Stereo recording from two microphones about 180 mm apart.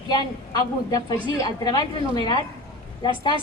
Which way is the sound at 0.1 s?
20° left (ahead or behind).